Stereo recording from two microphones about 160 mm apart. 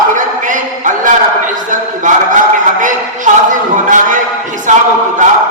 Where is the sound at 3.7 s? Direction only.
55° right (ahead or behind).